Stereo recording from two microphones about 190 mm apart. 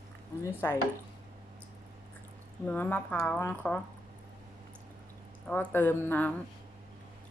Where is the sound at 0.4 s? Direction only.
10° left (ahead or behind).